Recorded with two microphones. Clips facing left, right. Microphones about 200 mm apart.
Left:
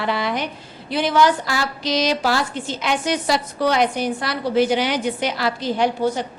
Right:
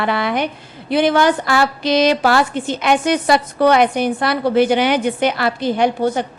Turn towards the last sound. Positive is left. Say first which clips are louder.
# right 3 dB
turn(degrees=-60)  # may be behind; listen again after turning